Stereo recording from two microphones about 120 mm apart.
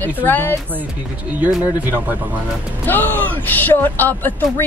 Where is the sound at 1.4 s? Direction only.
15° right (ahead or behind).